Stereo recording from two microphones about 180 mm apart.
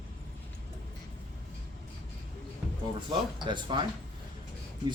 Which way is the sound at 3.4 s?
25° right (ahead or behind).